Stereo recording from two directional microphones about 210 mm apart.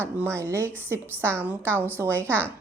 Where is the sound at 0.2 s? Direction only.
10° right (ahead or behind).